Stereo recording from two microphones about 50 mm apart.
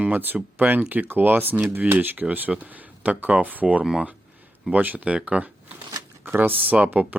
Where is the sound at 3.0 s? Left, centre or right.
Right.